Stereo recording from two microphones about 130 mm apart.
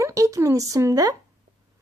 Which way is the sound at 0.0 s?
25° right (ahead or behind).